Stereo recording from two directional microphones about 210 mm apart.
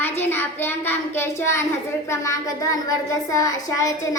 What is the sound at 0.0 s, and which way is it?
Child singing, 10° left (ahead or behind).